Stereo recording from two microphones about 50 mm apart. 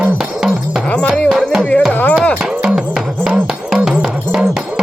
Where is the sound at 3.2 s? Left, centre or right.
Centre.